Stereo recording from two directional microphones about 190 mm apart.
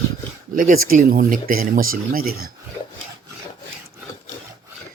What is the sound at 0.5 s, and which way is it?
Speech, 45° right (ahead or behind).